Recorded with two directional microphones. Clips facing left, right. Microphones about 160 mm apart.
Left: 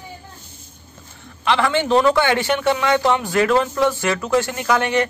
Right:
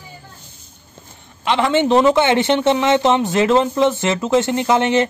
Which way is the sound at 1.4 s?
20° right (ahead or behind).